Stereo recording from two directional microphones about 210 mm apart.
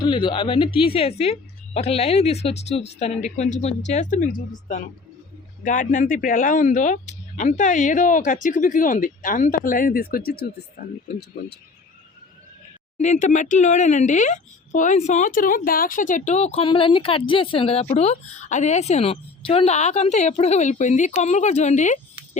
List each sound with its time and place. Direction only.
0.0 s speech: 20° left (ahead or behind); by 11.6 s 50° left (ahead or behind)
13.0 s speech: 35° left (ahead or behind)